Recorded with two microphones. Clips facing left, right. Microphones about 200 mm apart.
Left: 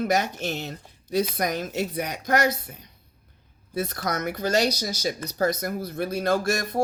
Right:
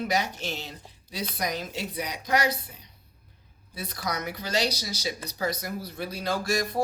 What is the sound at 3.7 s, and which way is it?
Speech, 50° left (ahead or behind).